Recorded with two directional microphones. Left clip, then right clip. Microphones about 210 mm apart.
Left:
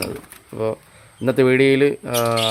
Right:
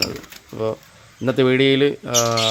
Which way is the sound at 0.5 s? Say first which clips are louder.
Left 1 dB; 5° left (ahead or behind).